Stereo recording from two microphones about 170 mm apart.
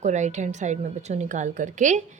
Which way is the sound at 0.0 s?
45° right (ahead or behind).